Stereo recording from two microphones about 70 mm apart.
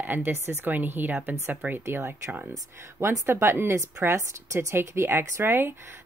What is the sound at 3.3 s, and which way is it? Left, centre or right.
Speech, right.